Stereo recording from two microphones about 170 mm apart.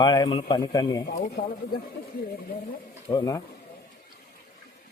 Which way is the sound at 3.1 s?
25° left (ahead or behind).